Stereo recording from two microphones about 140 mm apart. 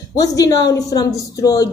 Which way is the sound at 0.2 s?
25° left (ahead or behind).